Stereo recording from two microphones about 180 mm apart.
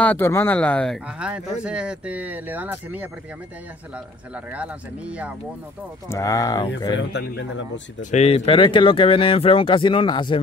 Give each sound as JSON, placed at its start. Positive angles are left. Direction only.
{"t": 0.0, "sound": "speech", "side_deg": 10}
{"t": 4.5, "sound": "speech", "side_deg": -5}
{"t": 6.0, "sound": "speech", "side_deg": 15}
{"t": 7.0, "sound": "speech", "side_deg": 75}
{"t": 8.0, "sound": "speech", "side_deg": 40}